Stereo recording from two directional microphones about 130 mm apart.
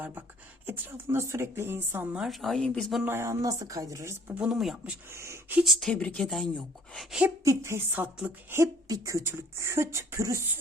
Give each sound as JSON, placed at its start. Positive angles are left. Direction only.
{"t": 0.0, "sound": "speech", "side_deg": -15}
{"t": 2.2, "sound": "speech", "side_deg": 0}
{"t": 3.0, "sound": "speech", "side_deg": -20}
{"t": 4.4, "sound": "speech", "side_deg": -5}
{"t": 5.1, "sound": "speech", "side_deg": -20}
{"t": 5.5, "sound": "speech", "side_deg": 0}
{"t": 7.4, "sound": "speech", "side_deg": -20}